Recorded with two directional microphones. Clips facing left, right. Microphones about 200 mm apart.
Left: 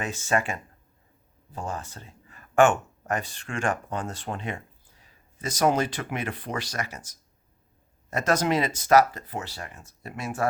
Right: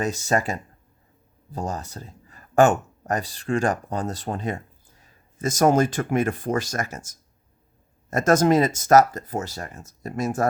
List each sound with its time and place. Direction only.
0.0 s speech: 40° right (ahead or behind)